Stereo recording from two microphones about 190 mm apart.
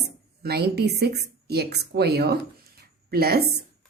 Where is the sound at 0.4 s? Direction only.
55° right (ahead or behind).